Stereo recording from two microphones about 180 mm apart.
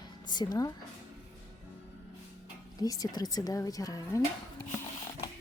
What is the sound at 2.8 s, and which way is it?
Speech, 20° left (ahead or behind).